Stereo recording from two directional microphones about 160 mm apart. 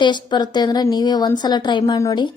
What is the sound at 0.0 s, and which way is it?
Speech, 30° left (ahead or behind).